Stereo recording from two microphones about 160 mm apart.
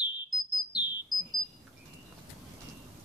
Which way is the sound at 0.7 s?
25° left (ahead or behind).